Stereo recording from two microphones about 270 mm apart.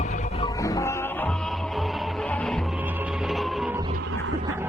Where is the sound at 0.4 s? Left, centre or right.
Centre.